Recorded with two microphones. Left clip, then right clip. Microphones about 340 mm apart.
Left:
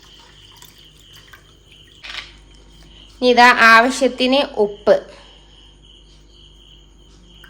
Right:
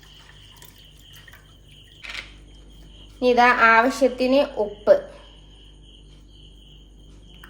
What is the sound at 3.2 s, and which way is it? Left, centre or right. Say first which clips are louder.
A woman's voice: left 6 dB; left.